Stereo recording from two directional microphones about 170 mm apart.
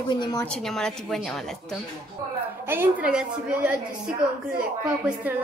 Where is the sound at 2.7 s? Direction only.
10° right (ahead or behind).